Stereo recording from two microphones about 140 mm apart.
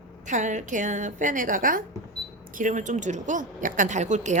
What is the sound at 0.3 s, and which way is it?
A woman's voice, 60° right (ahead or behind).